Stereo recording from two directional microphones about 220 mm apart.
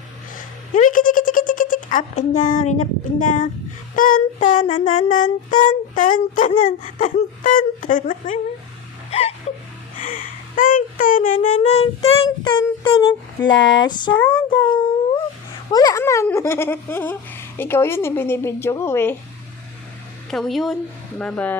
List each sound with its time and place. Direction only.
0.7 s a child's voice: 35° left (ahead or behind)
3.9 s music: 40° left (ahead or behind)
9.0 s wheeze: 25° left (ahead or behind)
10.0 s speech: 40° left (ahead or behind); by 14.1 s 20° left (ahead or behind)
14.1 s speech: 5° left (ahead or behind)
15.7 s speech: 15° left (ahead or behind)
20.3 s speech: centre (ahead or behind)